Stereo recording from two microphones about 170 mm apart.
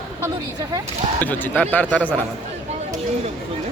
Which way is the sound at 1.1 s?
10° left (ahead or behind).